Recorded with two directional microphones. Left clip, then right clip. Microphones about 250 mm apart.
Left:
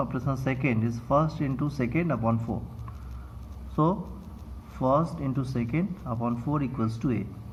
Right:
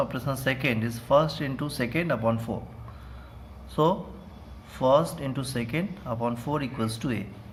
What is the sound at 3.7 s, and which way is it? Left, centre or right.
Speech, right.